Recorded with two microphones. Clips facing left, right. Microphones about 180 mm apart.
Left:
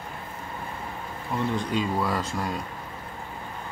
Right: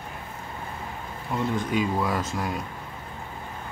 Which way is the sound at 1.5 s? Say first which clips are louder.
Right 3 dB; 5° right (ahead or behind).